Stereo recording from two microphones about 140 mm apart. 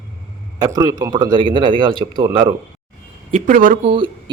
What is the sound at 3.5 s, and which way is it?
Speech, 75° right (ahead or behind).